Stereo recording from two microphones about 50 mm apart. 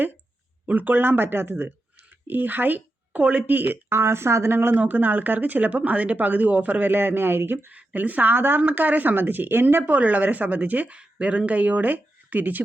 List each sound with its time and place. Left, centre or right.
0.6 s a woman's voice: right
3.8 s speech: right
4.8 s speech: right
7.7 s speech: right
8.3 s speech: right
9.9 s speech: right